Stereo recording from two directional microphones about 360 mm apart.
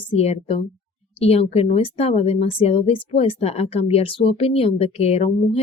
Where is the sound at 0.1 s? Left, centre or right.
Centre.